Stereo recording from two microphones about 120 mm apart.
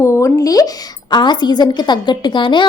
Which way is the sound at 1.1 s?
40° left (ahead or behind).